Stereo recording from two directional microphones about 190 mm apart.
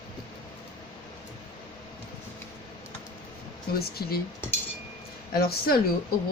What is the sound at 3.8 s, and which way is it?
Speech, 55° left (ahead or behind).